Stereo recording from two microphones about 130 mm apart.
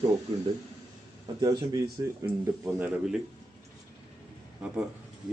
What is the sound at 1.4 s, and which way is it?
Speech, 30° right (ahead or behind).